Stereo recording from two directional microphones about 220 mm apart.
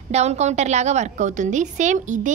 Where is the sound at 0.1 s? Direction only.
30° right (ahead or behind).